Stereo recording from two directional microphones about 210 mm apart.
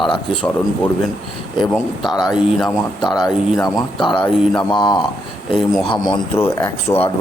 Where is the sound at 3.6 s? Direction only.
20° left (ahead or behind).